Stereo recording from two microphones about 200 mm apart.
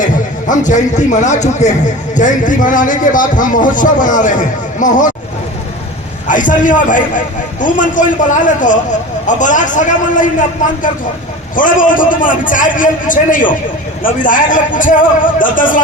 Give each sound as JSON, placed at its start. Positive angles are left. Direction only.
{"t": 0.0, "sound": "a man's voice", "side_deg": 40}
{"t": 6.2, "sound": "speech", "side_deg": 40}
{"t": 11.5, "sound": "speech", "side_deg": 40}